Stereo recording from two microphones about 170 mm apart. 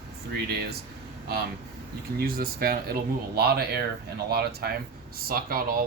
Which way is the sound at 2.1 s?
60° right (ahead or behind).